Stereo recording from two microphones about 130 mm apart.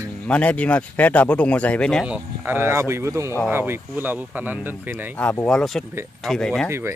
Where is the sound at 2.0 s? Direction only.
10° right (ahead or behind).